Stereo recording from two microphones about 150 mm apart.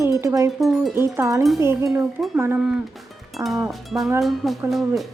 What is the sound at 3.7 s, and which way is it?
Music, centre (ahead or behind).